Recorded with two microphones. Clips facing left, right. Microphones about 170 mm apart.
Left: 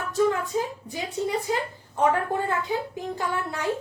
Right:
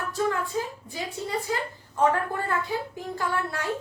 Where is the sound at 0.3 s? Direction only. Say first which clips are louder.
Left 2 dB; 20° left (ahead or behind).